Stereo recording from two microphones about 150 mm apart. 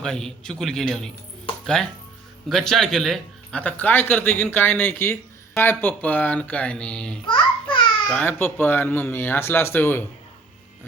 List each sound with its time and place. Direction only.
0.0 s a man's voice: 5° left (ahead or behind)
7.3 s babbling: 30° left (ahead or behind)
8.1 s speech: 10° left (ahead or behind)